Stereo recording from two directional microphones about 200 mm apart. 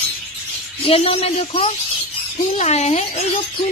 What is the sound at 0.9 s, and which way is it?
A woman's voice, 30° left (ahead or behind).